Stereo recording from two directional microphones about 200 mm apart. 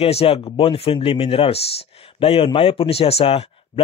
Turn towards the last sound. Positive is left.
turn(degrees=30)  # may be behind; listen again after turning